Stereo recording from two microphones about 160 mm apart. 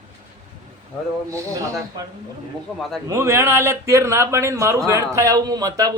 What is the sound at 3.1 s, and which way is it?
A man's voice, 15° right (ahead or behind).